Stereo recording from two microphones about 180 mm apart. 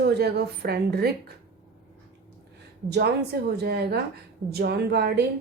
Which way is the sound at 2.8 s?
65° right (ahead or behind).